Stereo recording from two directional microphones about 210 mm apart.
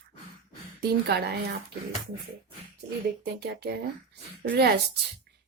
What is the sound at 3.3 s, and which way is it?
Speech, 50° right (ahead or behind).